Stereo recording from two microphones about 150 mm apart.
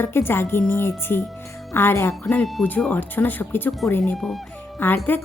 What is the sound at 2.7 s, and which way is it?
A woman's voice, 10° left (ahead or behind).